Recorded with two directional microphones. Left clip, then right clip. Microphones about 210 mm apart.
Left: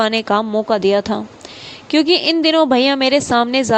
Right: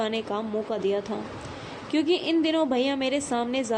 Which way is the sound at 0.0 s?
40° left (ahead or behind).